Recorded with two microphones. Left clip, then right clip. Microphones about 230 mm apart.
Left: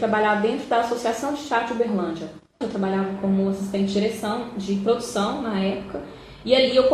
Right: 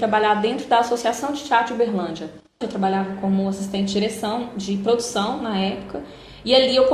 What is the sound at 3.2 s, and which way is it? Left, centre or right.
Speech, right.